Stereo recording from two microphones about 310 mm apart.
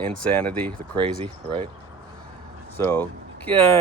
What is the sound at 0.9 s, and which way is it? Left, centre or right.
Speech, centre.